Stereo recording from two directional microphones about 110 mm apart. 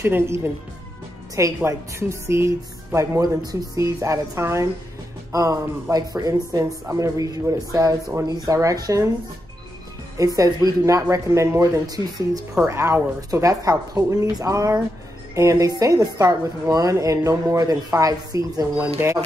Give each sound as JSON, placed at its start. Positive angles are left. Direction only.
{"t": 0.0, "sound": "a woman's voice", "side_deg": -20}
{"t": 10.1, "sound": "a woman's voice", "side_deg": -30}
{"t": 19.0, "sound": "speech", "side_deg": -20}